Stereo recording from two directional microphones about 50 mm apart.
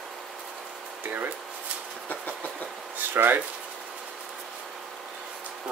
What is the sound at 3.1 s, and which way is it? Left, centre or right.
Speech, right.